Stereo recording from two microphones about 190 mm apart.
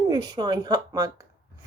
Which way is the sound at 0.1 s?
20° right (ahead or behind).